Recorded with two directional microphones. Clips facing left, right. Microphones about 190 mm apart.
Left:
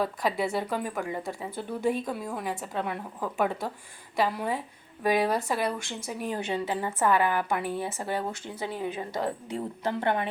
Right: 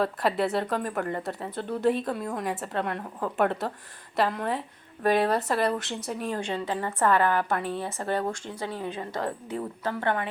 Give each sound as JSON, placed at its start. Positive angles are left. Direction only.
{"t": 0.0, "sound": "a woman's voice", "side_deg": 0}